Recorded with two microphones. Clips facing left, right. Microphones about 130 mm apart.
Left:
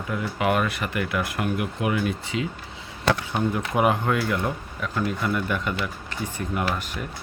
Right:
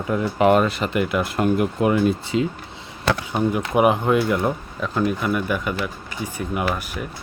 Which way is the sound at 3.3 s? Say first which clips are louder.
Right 4 dB; 15° right (ahead or behind).